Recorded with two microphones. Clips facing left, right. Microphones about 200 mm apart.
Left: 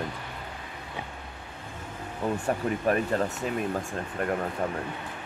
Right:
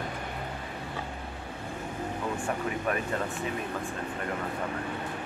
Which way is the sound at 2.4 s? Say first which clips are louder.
Left 4 dB; 40° left (ahead or behind).